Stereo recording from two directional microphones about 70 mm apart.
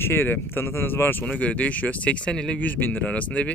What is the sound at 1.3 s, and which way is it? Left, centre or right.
Speech, centre.